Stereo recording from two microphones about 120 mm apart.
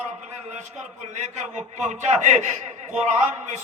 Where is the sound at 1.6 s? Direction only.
80° right.